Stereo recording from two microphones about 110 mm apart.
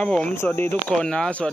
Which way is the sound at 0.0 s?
10° left (ahead or behind).